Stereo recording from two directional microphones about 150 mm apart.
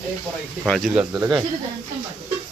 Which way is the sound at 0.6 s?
5° left (ahead or behind).